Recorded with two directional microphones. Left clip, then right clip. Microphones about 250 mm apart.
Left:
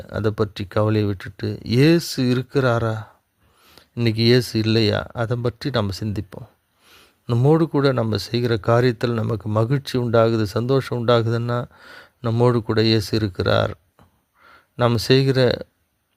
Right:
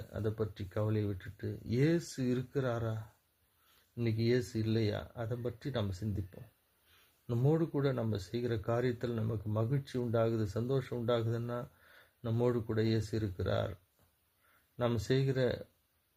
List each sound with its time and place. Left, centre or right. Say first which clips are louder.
0.1 s speech: left 15 dB; left
14.8 s speech: left 16 dB; left